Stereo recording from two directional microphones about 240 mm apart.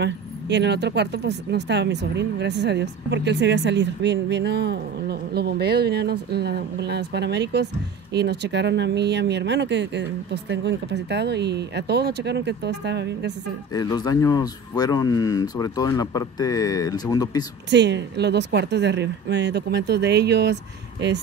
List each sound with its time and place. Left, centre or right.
0.0 s speech: right
13.7 s speech: centre
17.6 s speech: right